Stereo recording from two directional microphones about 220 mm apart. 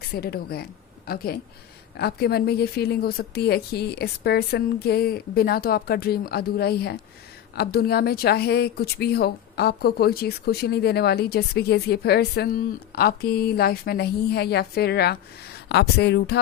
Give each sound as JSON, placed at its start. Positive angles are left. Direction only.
{"t": 0.0, "sound": "a woman's voice", "side_deg": 45}